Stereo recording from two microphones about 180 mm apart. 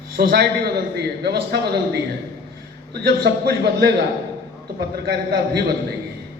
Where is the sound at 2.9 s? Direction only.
65° right (ahead or behind).